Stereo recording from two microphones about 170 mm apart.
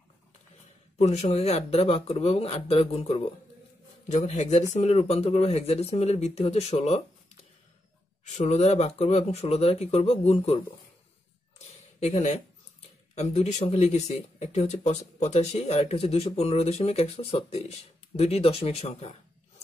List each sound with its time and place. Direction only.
0.9 s speech: 40° left (ahead or behind)
8.4 s speech: 40° left (ahead or behind)
11.5 s a sound: 40° left (ahead or behind)
13.1 s speech: 40° left (ahead or behind)